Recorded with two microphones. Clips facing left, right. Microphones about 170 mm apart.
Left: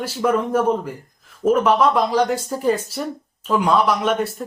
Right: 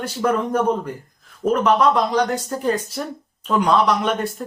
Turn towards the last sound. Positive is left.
turn(degrees=0)  # may be behind; listen again after turning